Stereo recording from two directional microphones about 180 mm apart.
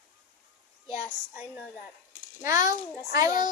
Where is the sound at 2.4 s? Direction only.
20° right (ahead or behind).